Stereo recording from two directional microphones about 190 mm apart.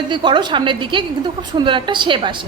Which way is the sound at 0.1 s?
25° right (ahead or behind).